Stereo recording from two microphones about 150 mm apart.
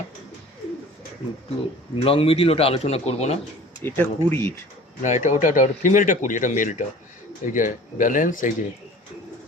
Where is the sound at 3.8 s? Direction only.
15° left (ahead or behind).